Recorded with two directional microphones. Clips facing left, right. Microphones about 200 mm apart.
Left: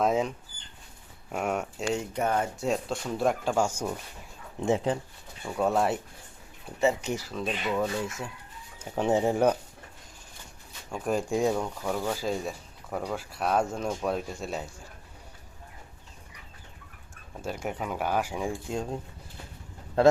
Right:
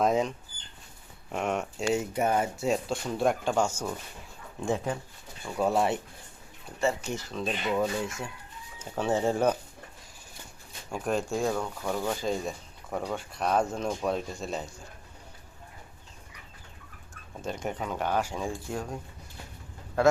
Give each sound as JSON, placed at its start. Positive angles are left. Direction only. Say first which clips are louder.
{"t": 0.0, "sound": "speech", "louder": "even", "side_deg": 5}
{"t": 1.9, "sound": "speech", "louder": "right 2 dB", "side_deg": -5}
{"t": 4.6, "sound": "speech", "louder": "left 4 dB", "side_deg": 25}
{"t": 5.5, "sound": "speech", "louder": "even", "side_deg": 0}
{"t": 6.7, "sound": "speech", "louder": "left 3 dB", "side_deg": 15}
{"t": 8.8, "sound": "speech", "louder": "left 2 dB", "side_deg": 15}
{"t": 10.9, "sound": "speech", "louder": "left 1 dB", "side_deg": 5}
{"t": 17.4, "sound": "speech", "louder": "even", "side_deg": 5}